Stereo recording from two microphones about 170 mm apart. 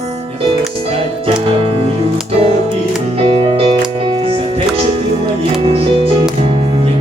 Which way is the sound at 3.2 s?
35° right (ahead or behind).